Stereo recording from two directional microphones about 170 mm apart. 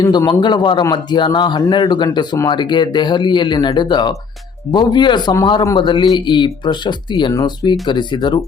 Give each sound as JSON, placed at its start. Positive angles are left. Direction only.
{"t": 0.0, "sound": "a man's voice", "side_deg": 20}